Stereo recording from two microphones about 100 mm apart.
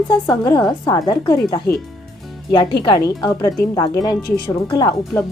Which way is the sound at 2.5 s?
50° left (ahead or behind).